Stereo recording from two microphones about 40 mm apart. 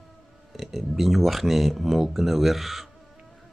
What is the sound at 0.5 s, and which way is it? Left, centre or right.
Speech, centre.